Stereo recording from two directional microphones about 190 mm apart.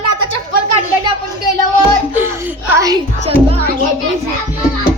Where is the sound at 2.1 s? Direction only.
10° right (ahead or behind).